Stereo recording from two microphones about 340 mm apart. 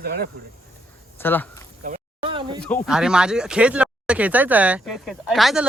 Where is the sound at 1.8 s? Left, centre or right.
Centre.